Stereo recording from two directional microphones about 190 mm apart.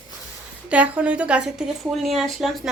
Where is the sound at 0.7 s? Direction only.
5° right (ahead or behind).